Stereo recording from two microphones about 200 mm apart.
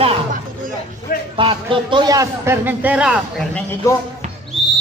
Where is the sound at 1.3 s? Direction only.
25° right (ahead or behind); by 3.1 s 5° right (ahead or behind).